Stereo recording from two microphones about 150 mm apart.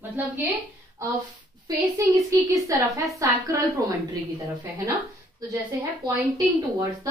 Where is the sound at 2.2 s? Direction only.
20° right (ahead or behind).